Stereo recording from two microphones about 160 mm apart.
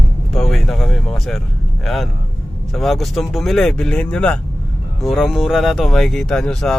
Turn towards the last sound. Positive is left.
turn(degrees=5)  # may be behind; listen again after turning